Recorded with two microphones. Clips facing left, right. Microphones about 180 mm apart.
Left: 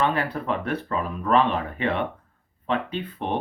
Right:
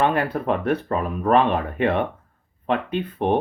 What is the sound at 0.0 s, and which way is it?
Speech, 50° right (ahead or behind).